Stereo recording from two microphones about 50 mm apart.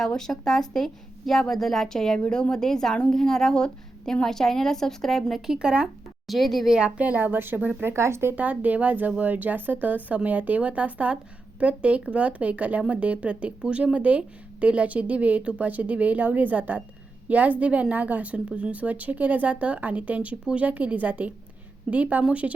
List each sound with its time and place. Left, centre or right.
0.0 s a woman's voice: centre
5.5 s speech: centre
6.2 s a woman's voice: centre
6.7 s speech: centre; by 7.9 s right
7.9 s speech: right
8.4 s speech: right
20.4 s speech: centre
20.7 s speech: right